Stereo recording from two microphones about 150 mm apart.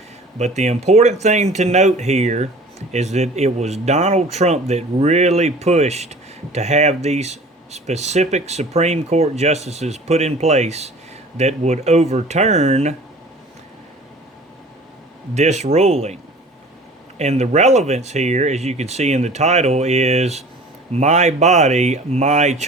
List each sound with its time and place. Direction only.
0.3 s speech: 50° right (ahead or behind)
15.4 s speech: 50° right (ahead or behind)